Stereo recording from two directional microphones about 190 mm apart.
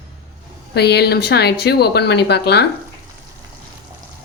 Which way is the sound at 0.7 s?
60° left (ahead or behind).